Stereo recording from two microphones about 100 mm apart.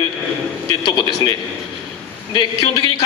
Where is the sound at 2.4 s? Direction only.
50° left (ahead or behind).